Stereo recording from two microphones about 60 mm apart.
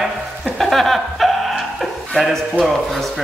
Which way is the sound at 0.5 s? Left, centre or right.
Centre.